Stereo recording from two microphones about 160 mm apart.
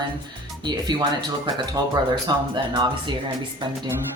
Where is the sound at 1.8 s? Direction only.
25° right (ahead or behind).